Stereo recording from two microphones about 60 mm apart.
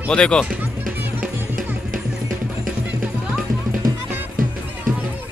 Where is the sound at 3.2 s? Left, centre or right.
Centre.